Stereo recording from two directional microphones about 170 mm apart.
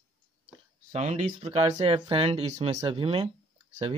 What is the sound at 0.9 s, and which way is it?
Speech, 40° right (ahead or behind).